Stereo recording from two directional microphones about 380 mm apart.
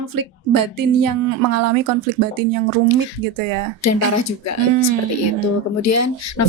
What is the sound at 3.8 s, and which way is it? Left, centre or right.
Speech, left.